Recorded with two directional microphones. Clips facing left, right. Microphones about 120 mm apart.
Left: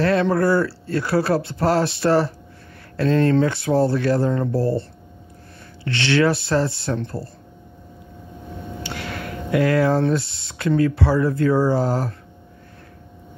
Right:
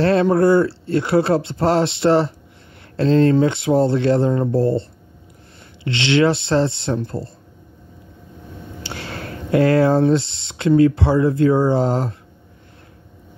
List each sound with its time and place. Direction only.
0.0 s speech: 30° right (ahead or behind)
5.9 s speech: 20° right (ahead or behind)
8.8 s speech: 30° right (ahead or behind)